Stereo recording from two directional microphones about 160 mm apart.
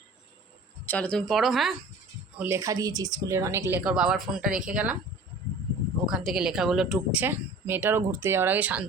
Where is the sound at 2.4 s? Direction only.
15° right (ahead or behind).